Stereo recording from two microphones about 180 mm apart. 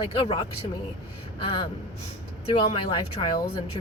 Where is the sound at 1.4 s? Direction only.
30° left (ahead or behind).